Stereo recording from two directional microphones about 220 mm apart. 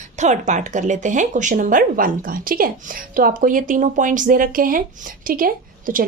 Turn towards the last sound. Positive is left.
turn(degrees=-40)  # may be behind; listen again after turning